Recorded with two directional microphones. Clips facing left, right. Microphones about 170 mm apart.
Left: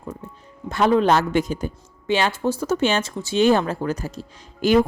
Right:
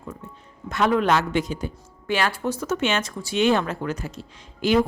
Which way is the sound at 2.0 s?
25° left (ahead or behind).